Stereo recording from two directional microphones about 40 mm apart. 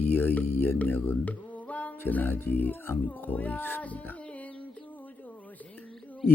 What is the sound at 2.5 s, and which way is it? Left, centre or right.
Speech, left.